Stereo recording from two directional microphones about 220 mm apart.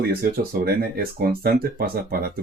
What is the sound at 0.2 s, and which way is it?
Speech, 45° right (ahead or behind).